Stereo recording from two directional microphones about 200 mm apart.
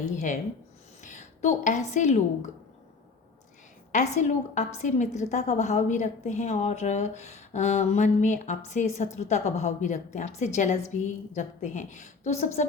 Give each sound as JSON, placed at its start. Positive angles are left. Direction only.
{"t": 1.0, "sound": "speech", "side_deg": 35}
{"t": 3.9, "sound": "a woman's voice", "side_deg": 35}